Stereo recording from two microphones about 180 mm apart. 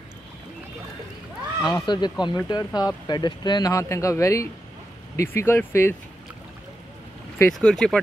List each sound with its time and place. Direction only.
1.6 s speech: 25° left (ahead or behind)
7.5 s speech: 5° left (ahead or behind)